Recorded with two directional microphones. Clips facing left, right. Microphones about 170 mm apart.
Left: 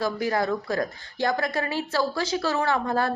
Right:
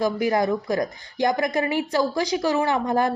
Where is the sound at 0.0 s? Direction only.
15° right (ahead or behind).